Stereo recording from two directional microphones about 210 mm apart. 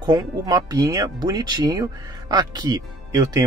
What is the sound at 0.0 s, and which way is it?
Speech, 20° right (ahead or behind).